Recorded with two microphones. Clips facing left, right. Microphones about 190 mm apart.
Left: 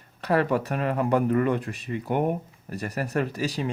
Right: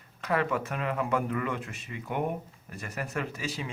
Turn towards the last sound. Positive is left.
turn(degrees=35)  # may be behind; listen again after turning